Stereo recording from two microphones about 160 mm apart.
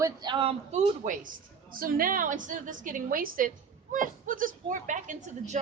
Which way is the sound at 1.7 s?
60° right (ahead or behind).